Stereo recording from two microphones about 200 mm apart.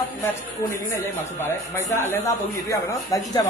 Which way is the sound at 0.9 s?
10° left (ahead or behind).